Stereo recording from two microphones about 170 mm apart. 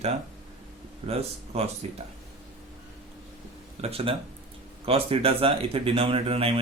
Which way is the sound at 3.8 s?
35° right (ahead or behind).